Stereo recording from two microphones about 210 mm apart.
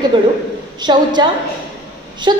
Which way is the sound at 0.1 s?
25° right (ahead or behind).